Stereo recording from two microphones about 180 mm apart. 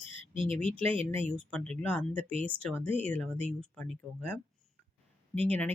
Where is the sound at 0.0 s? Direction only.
30° right (ahead or behind).